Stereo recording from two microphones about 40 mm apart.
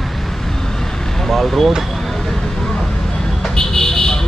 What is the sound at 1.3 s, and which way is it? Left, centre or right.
Speech, centre.